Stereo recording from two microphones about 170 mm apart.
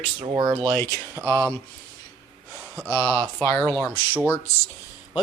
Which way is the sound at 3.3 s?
5° left (ahead or behind).